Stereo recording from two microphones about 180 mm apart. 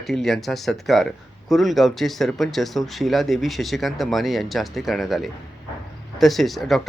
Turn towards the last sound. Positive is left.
turn(degrees=0)  # may be behind; listen again after turning